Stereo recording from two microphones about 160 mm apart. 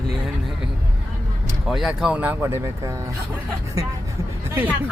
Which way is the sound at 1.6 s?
Centre (ahead or behind).